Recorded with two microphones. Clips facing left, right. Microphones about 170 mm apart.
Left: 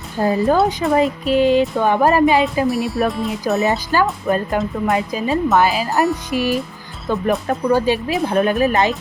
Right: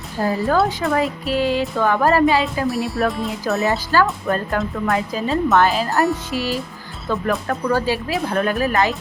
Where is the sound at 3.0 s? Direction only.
Centre (ahead or behind).